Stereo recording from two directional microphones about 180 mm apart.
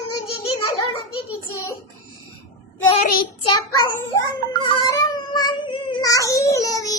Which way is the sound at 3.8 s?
25° left (ahead or behind).